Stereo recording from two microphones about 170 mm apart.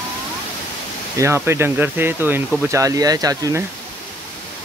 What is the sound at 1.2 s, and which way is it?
Speech, 15° right (ahead or behind).